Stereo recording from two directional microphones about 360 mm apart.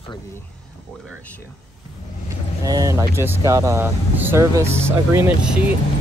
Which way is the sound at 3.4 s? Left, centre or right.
Centre.